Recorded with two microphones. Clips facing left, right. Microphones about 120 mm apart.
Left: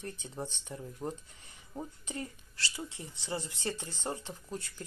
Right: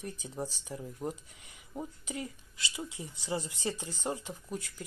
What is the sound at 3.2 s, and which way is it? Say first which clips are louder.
Speech: right 2 dB; 20° right (ahead or behind).